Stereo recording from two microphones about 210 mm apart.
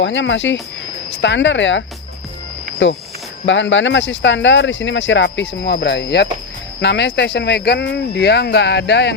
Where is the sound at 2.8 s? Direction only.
60° left (ahead or behind).